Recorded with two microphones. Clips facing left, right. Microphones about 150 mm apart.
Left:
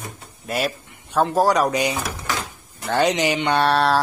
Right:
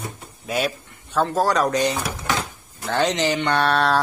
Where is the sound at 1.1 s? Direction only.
10° left (ahead or behind).